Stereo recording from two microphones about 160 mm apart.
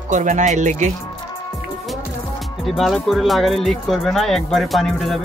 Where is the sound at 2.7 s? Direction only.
Centre (ahead or behind).